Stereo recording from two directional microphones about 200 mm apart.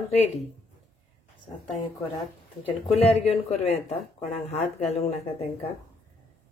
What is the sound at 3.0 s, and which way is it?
Speech, 30° left (ahead or behind).